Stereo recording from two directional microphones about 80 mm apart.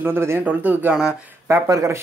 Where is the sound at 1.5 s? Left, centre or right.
Right.